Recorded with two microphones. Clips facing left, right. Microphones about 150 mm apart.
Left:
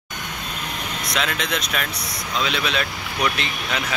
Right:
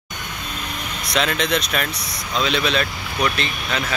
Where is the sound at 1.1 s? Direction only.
5° left (ahead or behind).